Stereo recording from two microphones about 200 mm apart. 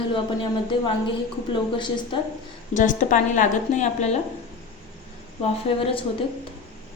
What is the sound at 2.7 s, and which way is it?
A woman's voice, 40° left (ahead or behind).